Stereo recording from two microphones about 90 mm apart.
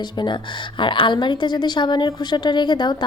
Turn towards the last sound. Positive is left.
turn(degrees=55)  # may be behind; listen again after turning